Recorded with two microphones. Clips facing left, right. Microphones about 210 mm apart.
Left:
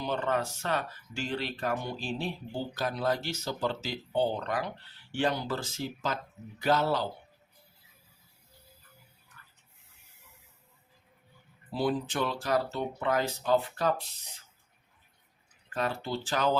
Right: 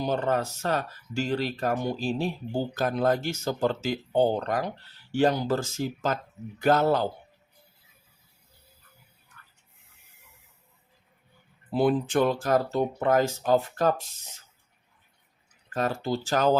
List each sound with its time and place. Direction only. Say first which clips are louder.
0.0 s speech: right 4 dB; 40° right (ahead or behind)
11.7 s speech: right 7 dB; 55° right (ahead or behind)
15.7 s speech: right 5 dB; 40° right (ahead or behind)